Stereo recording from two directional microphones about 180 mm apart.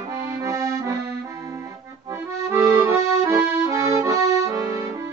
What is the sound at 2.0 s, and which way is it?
Accordion, 15° right (ahead or behind).